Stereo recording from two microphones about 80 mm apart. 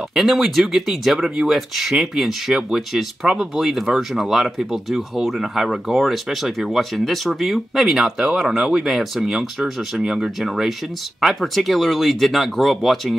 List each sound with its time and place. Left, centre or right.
0.1 s speech: centre